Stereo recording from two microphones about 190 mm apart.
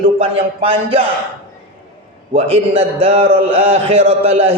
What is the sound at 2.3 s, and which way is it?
A man's voice, 30° right (ahead or behind).